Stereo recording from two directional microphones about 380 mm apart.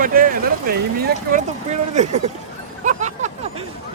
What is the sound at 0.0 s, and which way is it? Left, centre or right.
Speech, right.